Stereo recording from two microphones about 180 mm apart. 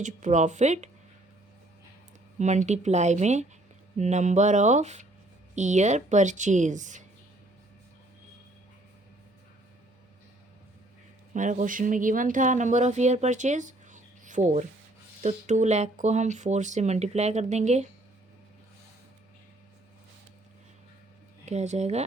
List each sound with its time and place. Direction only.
0.0 s speech: 45° right (ahead or behind)
2.4 s speech: 40° right (ahead or behind)
11.3 s speech: 45° right (ahead or behind)
21.4 s speech: 40° right (ahead or behind)